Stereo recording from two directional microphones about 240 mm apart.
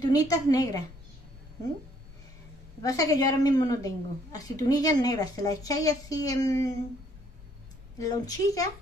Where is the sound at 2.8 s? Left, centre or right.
Centre.